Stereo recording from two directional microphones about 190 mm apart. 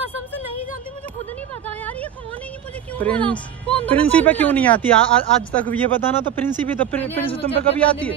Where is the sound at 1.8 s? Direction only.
10° left (ahead or behind).